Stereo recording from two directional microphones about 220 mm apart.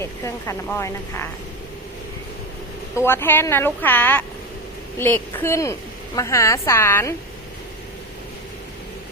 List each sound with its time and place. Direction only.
0.0 s speech: 10° left (ahead or behind)
2.9 s speech: 10° left (ahead or behind)